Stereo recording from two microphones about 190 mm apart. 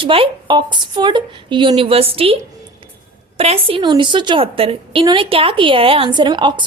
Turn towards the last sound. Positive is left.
turn(degrees=-25)  # may be behind; listen again after turning